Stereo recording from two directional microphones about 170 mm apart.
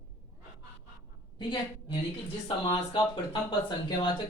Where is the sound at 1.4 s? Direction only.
30° left (ahead or behind).